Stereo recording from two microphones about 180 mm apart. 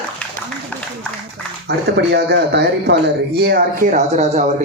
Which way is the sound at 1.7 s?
70° right (ahead or behind).